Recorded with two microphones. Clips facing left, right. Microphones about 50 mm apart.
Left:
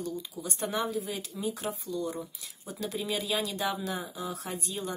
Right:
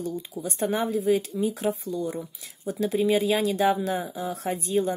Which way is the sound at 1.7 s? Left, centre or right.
Right.